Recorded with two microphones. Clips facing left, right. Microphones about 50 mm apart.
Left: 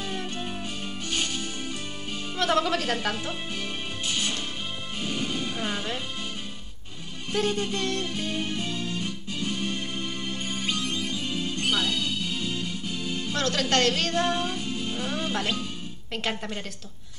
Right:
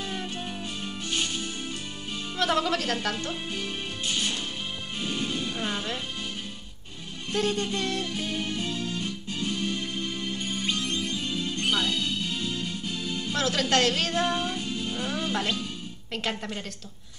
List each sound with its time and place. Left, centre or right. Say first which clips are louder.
0.0 s music: left 1 dB; centre
2.3 s music: left 1 dB; centre
7.3 s music: left 1 dB; centre
9.0 s organ: even; centre
10.4 s music: left 1 dB; centre
11.7 s music: even; centre
14.6 s music: even; left
15.0 s music: right 1 dB; centre